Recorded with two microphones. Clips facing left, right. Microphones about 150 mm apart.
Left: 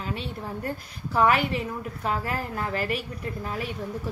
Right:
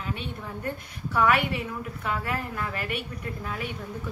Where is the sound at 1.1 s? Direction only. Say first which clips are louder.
Left 2 dB; 35° left (ahead or behind).